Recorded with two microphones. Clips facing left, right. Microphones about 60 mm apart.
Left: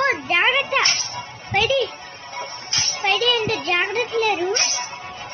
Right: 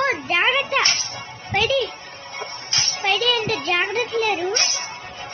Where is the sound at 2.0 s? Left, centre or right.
Right.